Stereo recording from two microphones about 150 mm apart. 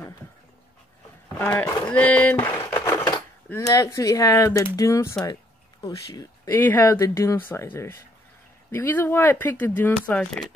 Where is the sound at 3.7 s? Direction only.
25° left (ahead or behind).